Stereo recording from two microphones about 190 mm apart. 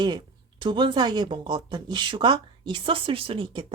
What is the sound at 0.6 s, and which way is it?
A woman's voice, 25° right (ahead or behind).